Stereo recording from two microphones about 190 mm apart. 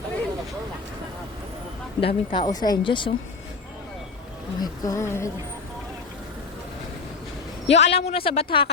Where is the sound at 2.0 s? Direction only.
30° left (ahead or behind).